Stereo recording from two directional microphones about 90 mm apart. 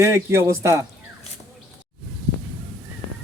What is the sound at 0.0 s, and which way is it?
Speech, 30° right (ahead or behind).